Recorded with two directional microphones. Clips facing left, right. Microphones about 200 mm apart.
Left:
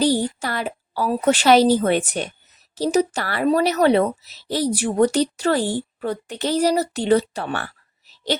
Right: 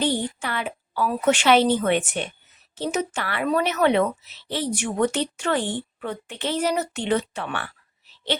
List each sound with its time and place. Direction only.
0.0 s a woman's voice: 40° left (ahead or behind)